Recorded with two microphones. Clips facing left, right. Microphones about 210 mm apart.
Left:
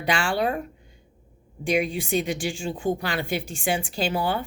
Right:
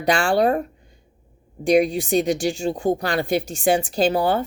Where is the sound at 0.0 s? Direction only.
40° right (ahead or behind).